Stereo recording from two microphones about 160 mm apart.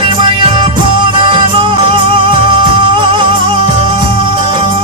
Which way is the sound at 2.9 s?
30° right (ahead or behind).